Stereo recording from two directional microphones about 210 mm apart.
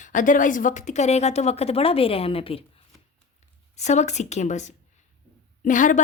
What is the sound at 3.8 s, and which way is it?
A woman's voice, 35° left (ahead or behind).